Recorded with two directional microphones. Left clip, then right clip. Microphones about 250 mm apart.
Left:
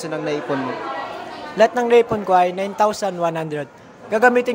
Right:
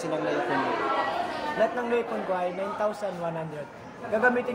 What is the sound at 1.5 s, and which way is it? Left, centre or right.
Speech, left.